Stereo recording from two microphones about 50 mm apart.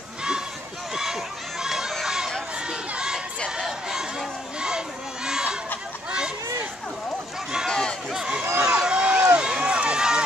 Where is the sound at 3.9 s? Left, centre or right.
Centre.